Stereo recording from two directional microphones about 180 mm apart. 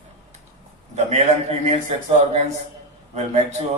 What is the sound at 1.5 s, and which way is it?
Speech, 35° right (ahead or behind).